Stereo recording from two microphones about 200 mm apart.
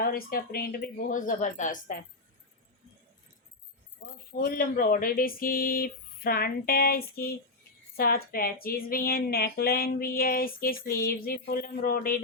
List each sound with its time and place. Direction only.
0.0 s speech: 50° left (ahead or behind)
4.0 s speech: 45° left (ahead or behind)